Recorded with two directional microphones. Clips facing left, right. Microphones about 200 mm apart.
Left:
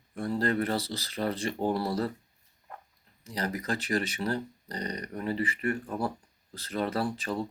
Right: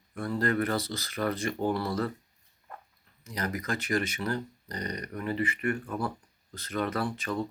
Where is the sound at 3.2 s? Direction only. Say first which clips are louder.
Left 1 dB; 30° left (ahead or behind).